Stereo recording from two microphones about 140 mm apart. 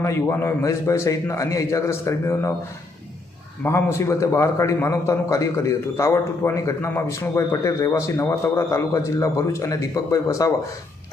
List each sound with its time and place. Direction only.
0.0 s a man's voice: 15° left (ahead or behind)
3.6 s a man's voice: 15° left (ahead or behind)